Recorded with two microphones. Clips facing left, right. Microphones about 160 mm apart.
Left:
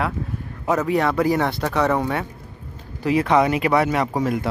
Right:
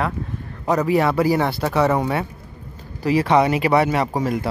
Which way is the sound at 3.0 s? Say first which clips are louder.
Right 1 dB; centre (ahead or behind).